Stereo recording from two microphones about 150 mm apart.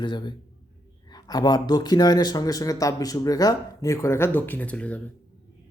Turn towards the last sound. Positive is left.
turn(degrees=10)  # may be behind; listen again after turning